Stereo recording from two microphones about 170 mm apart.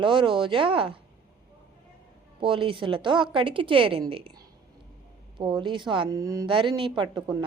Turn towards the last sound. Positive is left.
turn(degrees=-25)  # may be behind; listen again after turning